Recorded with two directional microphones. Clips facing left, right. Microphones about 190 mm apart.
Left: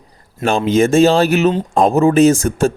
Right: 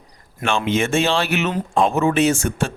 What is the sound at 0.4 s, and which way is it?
A man's voice, 40° left (ahead or behind).